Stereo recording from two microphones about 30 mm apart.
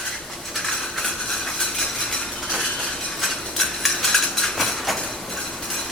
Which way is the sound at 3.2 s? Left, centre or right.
Centre.